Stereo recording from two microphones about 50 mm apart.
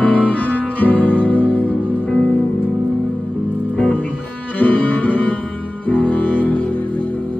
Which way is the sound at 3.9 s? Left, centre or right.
Left.